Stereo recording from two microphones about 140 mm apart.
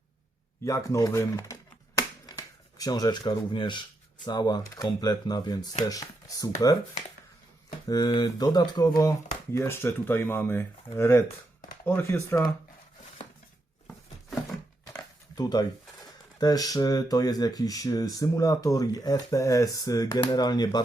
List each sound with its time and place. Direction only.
0.6 s speech: 20° left (ahead or behind)
2.7 s speech: 30° left (ahead or behind)
7.9 s speech: 30° left (ahead or behind)
15.4 s speech: 30° left (ahead or behind)